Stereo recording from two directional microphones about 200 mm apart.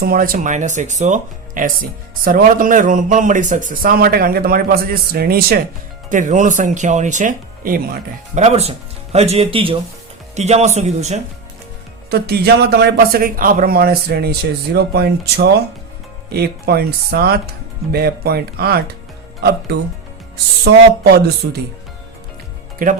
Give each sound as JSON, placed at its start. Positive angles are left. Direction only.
{"t": 0.0, "sound": "speech", "side_deg": -45}
{"t": 12.1, "sound": "speech", "side_deg": -50}
{"t": 21.0, "sound": "speech", "side_deg": -55}
{"t": 22.8, "sound": "speech", "side_deg": -45}